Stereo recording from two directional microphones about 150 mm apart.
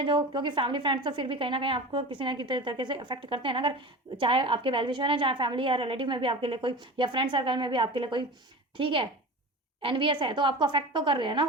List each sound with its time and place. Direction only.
0.0 s speech: 30° right (ahead or behind)